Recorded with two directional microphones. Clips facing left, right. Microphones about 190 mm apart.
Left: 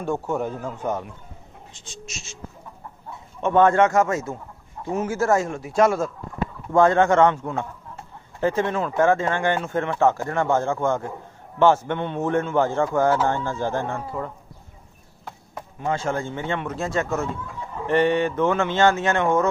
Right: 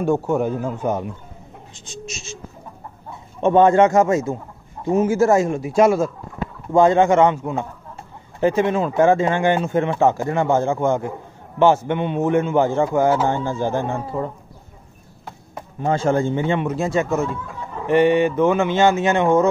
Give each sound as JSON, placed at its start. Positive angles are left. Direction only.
{"t": 0.0, "sound": "speech", "side_deg": -10}
{"t": 3.3, "sound": "a man's voice", "side_deg": -20}
{"t": 13.9, "sound": "a man's voice", "side_deg": -25}
{"t": 15.8, "sound": "speech", "side_deg": -30}